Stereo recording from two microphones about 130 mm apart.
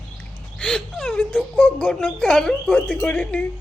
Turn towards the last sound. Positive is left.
turn(degrees=5)  # may be behind; listen again after turning